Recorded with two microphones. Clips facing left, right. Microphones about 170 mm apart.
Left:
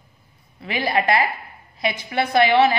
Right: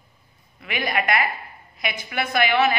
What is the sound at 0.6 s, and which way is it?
A woman's voice, 30° left (ahead or behind).